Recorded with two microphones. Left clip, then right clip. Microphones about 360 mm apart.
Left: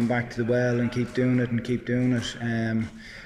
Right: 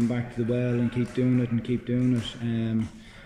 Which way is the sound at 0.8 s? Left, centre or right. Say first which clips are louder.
Left 1 dB; centre.